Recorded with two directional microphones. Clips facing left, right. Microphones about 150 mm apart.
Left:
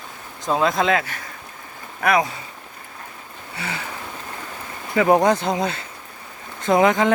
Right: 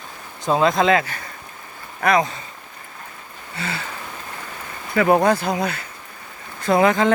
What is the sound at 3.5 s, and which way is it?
Speech, 15° left (ahead or behind).